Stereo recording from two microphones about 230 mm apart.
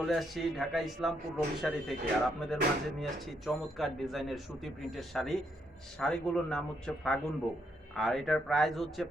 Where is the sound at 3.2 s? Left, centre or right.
Centre.